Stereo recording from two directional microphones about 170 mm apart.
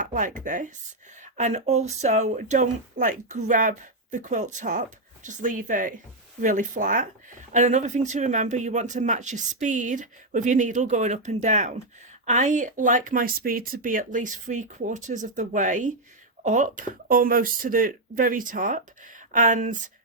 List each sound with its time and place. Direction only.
0.0 s speech: 50° right (ahead or behind)